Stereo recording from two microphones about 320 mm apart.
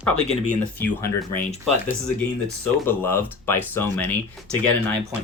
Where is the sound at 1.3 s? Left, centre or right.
Left.